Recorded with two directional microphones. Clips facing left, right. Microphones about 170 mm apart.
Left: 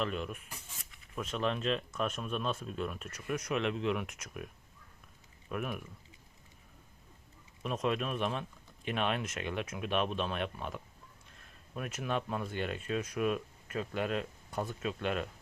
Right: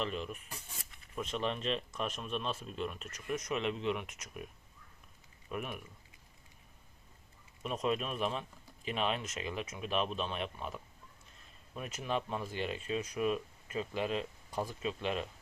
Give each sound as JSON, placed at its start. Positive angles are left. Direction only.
{"t": 0.0, "sound": "speech", "side_deg": 0}
{"t": 5.5, "sound": "speech", "side_deg": 0}
{"t": 7.6, "sound": "speech", "side_deg": 0}